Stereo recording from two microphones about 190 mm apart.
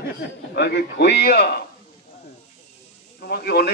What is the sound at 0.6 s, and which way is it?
A man's voice, 60° left (ahead or behind).